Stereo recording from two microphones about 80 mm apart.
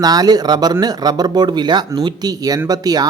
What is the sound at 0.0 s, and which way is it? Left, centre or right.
Speech, right.